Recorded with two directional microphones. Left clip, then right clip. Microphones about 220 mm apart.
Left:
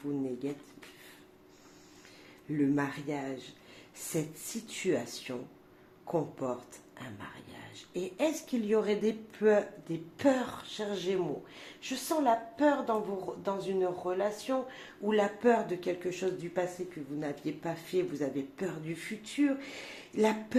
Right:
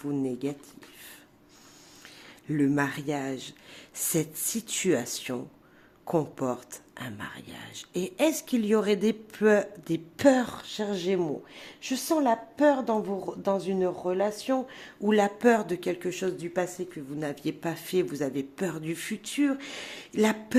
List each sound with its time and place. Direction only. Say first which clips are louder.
0.0 s speech: right 5 dB; 40° right (ahead or behind)
2.5 s speech: right 4 dB; 40° right (ahead or behind)
4.8 s speech: right 5 dB; 45° right (ahead or behind)